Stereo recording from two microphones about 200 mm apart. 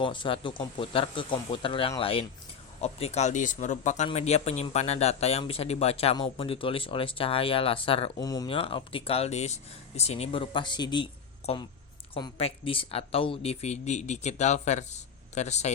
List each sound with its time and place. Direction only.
0.0 s speech: 25° left (ahead or behind)